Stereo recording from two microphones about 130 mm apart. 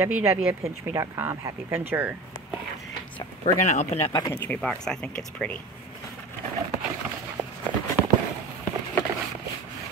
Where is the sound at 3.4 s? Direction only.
65° left (ahead or behind).